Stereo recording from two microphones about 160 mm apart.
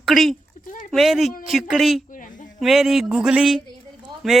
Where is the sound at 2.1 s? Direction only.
55° left (ahead or behind).